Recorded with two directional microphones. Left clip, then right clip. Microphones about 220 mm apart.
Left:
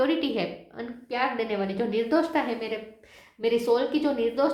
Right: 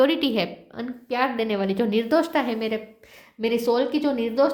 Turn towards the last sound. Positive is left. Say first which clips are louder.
# right 3 dB
turn(degrees=-40)  # may be behind; listen again after turning